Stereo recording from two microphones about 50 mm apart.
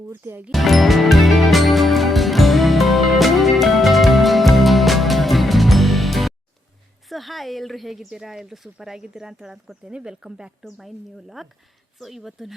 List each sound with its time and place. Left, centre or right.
0.1 s speech: right
0.5 s music: centre
7.1 s a woman's voice: centre
10.6 s speech: centre